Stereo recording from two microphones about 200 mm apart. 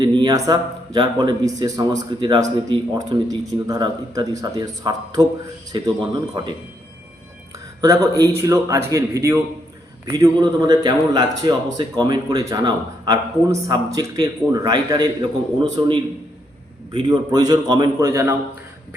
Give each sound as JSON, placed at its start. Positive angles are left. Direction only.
{"t": 0.0, "sound": "a man's voice", "side_deg": -20}
{"t": 7.8, "sound": "a man's voice", "side_deg": -15}